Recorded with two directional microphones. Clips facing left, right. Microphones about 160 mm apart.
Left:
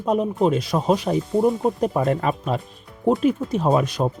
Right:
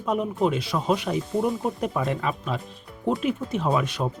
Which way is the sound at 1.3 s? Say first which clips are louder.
Left 7 dB; 25° left (ahead or behind).